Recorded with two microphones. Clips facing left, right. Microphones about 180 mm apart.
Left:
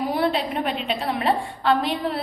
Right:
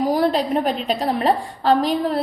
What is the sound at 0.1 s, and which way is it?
A woman's voice, 40° right (ahead or behind).